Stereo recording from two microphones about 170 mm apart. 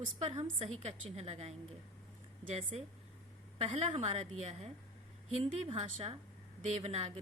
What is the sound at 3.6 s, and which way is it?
A woman's voice, 40° right (ahead or behind).